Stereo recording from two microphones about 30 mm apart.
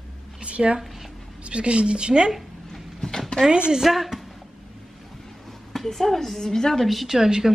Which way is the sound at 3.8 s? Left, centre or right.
Centre.